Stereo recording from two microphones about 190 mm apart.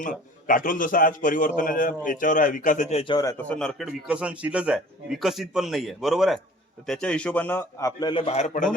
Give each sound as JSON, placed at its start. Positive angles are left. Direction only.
{"t": 0.0, "sound": "a man's voice", "side_deg": 45}
{"t": 3.5, "sound": "a man's voice", "side_deg": 5}